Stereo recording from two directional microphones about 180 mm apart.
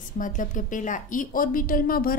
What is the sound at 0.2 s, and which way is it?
A woman's voice, 45° left (ahead or behind).